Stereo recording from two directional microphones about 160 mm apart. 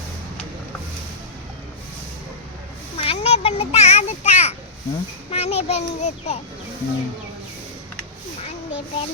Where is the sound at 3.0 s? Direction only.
40° left (ahead or behind).